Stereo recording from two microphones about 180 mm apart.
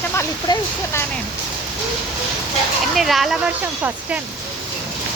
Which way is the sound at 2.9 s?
Centre (ahead or behind).